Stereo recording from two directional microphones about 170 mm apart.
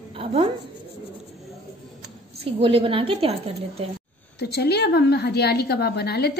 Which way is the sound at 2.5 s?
30° right (ahead or behind).